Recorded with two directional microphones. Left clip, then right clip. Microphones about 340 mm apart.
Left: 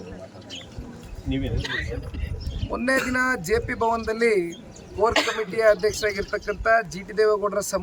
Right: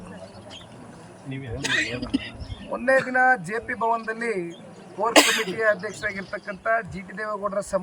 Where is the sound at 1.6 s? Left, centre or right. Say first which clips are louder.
Right 5 dB; right.